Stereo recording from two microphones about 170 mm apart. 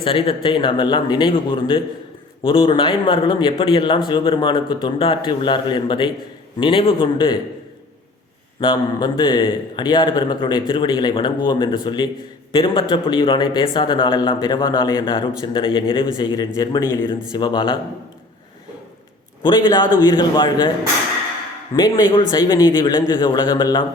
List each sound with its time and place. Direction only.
0.0 s a man's voice: 35° left (ahead or behind)
8.6 s a man's voice: 25° left (ahead or behind)
19.4 s a man's voice: 25° left (ahead or behind)
21.8 s a man's voice: 25° left (ahead or behind)